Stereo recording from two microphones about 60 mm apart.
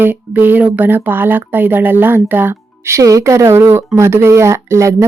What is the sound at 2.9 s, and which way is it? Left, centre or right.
Speech, right.